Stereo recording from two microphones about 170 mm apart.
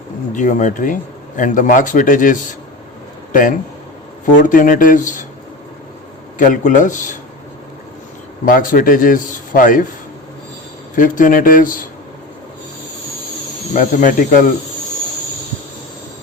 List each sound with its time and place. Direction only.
0.3 s a man's voice: 45° left (ahead or behind)
4.3 s a man's voice: 50° left (ahead or behind)
6.4 s a man's voice: 50° left (ahead or behind)
8.4 s a man's voice: 55° left (ahead or behind)
10.9 s a man's voice: 50° left (ahead or behind)
13.7 s a man's voice: 50° left (ahead or behind)